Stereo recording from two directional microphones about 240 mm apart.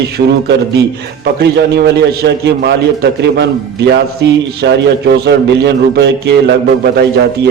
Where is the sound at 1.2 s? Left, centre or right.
Right.